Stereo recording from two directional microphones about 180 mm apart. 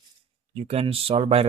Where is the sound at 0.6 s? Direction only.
35° right (ahead or behind).